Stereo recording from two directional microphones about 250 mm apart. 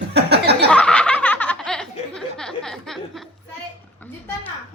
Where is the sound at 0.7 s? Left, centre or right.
Centre.